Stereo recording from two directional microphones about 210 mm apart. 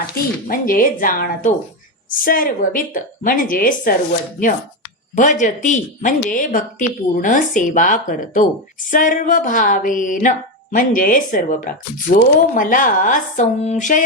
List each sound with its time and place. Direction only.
0.4 s speech: 40° left (ahead or behind)